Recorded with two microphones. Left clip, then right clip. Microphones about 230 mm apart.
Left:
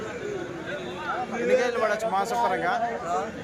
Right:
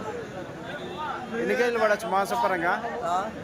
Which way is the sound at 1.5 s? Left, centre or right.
Right.